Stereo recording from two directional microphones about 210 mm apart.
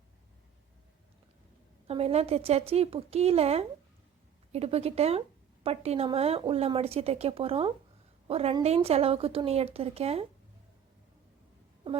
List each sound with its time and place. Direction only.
1.9 s speech: 30° right (ahead or behind)